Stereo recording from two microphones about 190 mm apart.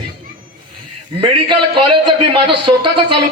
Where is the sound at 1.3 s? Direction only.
25° right (ahead or behind).